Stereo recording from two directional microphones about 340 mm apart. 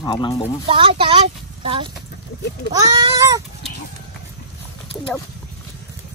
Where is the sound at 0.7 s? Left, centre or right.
Centre.